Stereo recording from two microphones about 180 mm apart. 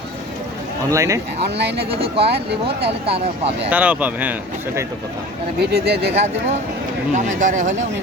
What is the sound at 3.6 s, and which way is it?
Speech, 10° right (ahead or behind).